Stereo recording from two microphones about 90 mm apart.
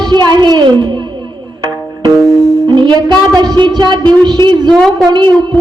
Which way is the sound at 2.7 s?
55° right (ahead or behind).